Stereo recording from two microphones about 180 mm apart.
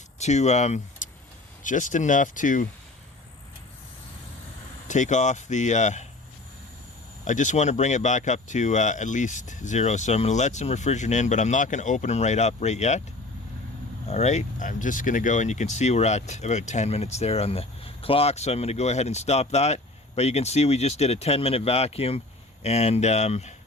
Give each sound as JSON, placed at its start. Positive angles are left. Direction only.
{"t": 0.2, "sound": "speech", "side_deg": 40}
{"t": 4.9, "sound": "speech", "side_deg": 40}
{"t": 7.3, "sound": "speech", "side_deg": 45}
{"t": 14.1, "sound": "speech", "side_deg": 40}